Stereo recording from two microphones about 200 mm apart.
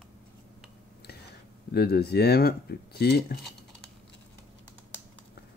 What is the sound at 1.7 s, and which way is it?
Speech, 50° left (ahead or behind).